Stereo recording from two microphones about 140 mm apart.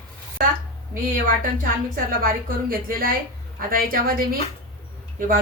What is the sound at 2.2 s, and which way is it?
A woman's voice, 90° right.